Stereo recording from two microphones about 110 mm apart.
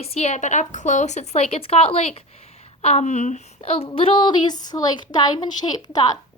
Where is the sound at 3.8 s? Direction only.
55° left (ahead or behind); by 6.1 s 40° left (ahead or behind).